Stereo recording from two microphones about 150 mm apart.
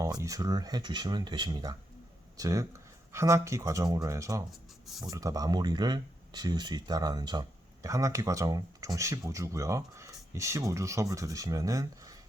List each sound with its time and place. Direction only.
0.0 s speech: 20° right (ahead or behind)
4.9 s speech: centre (ahead or behind)
5.1 s speech: 25° right (ahead or behind)